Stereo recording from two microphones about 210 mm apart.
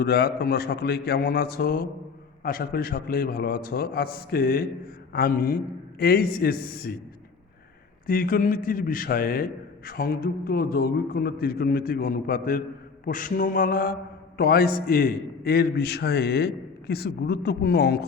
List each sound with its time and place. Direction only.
0.0 s a man's voice: 50° left (ahead or behind)
8.0 s a man's voice: 40° left (ahead or behind)
13.1 s mantra: 40° left (ahead or behind)
14.3 s a man's voice: 45° left (ahead or behind)